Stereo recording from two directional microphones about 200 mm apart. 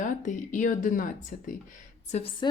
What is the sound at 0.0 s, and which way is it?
A woman's voice, 40° left (ahead or behind).